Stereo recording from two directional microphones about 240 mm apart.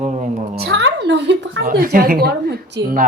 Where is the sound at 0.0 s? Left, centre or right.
Right.